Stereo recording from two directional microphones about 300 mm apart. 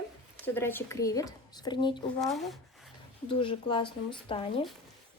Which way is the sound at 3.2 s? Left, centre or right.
Centre.